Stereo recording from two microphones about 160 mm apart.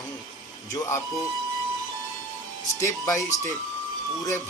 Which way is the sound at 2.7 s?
20° left (ahead or behind).